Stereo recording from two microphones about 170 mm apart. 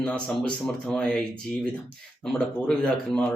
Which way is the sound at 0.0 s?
5° left (ahead or behind).